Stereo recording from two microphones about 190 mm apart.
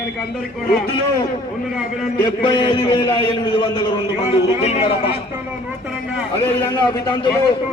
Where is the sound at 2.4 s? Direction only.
25° left (ahead or behind).